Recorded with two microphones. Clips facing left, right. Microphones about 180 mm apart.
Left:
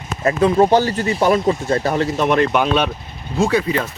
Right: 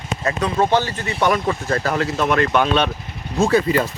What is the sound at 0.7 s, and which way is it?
Speech, 40° left (ahead or behind).